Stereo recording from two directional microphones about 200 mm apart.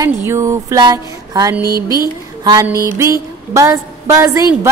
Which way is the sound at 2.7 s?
15° right (ahead or behind).